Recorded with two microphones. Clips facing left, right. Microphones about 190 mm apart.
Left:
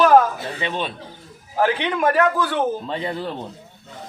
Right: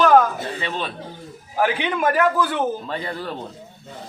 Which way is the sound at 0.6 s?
20° left (ahead or behind).